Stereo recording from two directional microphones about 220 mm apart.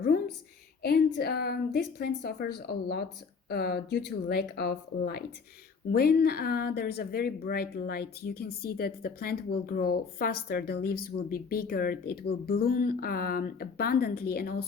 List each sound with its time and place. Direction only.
0.8 s a woman's voice: 45° left (ahead or behind)